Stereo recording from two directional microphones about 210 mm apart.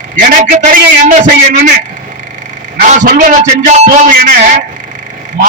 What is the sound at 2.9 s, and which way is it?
Speech, 40° right (ahead or behind).